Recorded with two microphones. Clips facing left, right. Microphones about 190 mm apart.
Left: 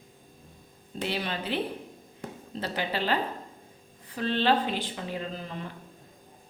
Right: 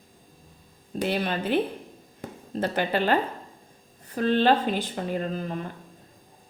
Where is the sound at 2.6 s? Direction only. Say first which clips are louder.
Right 6 dB; 50° right (ahead or behind).